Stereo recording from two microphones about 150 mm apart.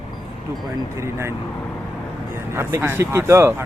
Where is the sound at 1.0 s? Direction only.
20° right (ahead or behind).